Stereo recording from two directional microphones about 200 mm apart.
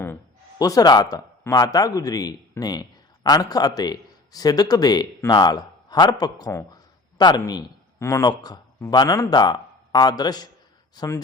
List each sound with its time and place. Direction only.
0.6 s a man's voice: 20° left (ahead or behind)